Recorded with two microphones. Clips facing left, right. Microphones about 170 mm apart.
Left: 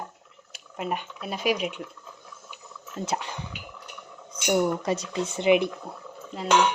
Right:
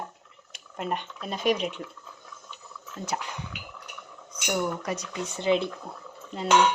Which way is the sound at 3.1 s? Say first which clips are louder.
Left 1 dB; 25° left (ahead or behind).